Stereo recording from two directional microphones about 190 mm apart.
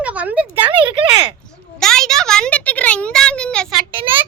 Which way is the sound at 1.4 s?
5° left (ahead or behind).